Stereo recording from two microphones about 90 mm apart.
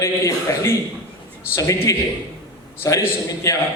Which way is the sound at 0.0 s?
30° left (ahead or behind).